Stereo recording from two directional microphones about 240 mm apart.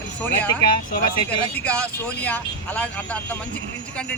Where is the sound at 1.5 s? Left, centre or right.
Centre.